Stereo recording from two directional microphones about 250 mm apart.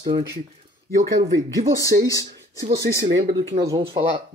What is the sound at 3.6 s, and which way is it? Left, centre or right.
Speech, centre.